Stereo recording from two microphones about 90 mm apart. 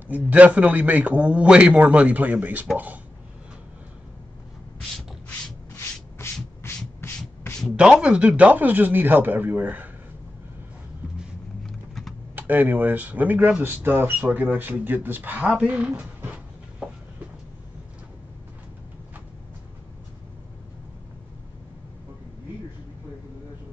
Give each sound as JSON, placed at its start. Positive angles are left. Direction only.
{"t": 0.1, "sound": "a man's voice", "side_deg": -15}
{"t": 6.7, "sound": "rub", "side_deg": 30}
{"t": 7.0, "sound": "sanding", "side_deg": 25}
{"t": 7.7, "sound": "speech", "side_deg": -10}
{"t": 11.6, "sound": "vehicle", "side_deg": 5}
{"t": 12.4, "sound": "speech", "side_deg": -20}